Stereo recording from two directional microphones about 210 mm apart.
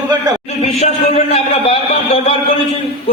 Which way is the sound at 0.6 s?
30° left (ahead or behind).